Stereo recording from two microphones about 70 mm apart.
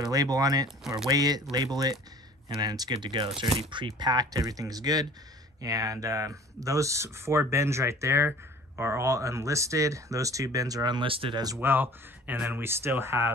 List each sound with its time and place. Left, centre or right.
0.0 s speech: right
4.0 s speech: right
5.6 s speech: right
11.6 s speech: right